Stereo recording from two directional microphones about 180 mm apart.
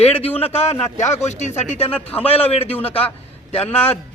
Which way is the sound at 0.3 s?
35° left (ahead or behind).